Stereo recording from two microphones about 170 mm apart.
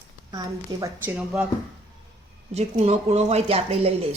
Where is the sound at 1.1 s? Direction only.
5° right (ahead or behind).